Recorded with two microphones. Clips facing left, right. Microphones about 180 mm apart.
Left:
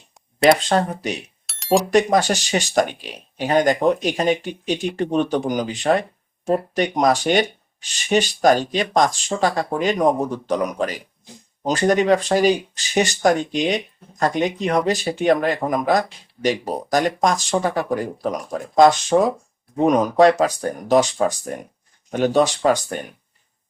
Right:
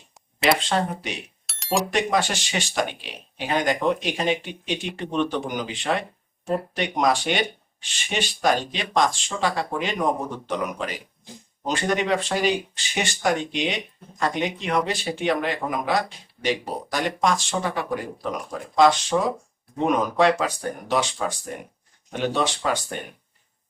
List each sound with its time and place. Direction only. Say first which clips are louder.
0.7 s speech: left 5 dB; 45° left (ahead or behind)
1.5 s bicycle bell: left 6 dB; centre (ahead or behind)
1.9 s speech: left 6 dB; 40° left (ahead or behind)